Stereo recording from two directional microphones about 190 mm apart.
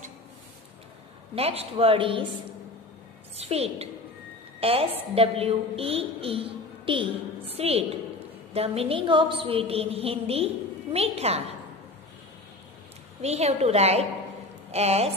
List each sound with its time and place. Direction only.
1.3 s a woman's voice: 30° right (ahead or behind)
3.3 s a woman's voice: 35° right (ahead or behind)
13.2 s a woman's voice: 35° right (ahead or behind)